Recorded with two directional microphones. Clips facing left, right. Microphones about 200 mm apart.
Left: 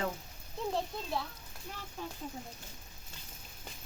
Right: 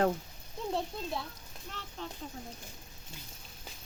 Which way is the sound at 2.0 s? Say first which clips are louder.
Even; 10° left (ahead or behind).